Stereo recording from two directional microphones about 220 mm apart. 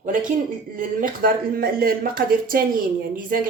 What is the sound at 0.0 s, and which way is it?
Speech, 35° right (ahead or behind).